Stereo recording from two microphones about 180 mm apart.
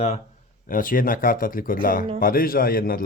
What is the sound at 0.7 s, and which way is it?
A man's voice, 50° left (ahead or behind).